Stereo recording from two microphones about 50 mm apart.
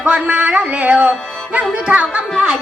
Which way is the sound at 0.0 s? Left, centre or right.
Right.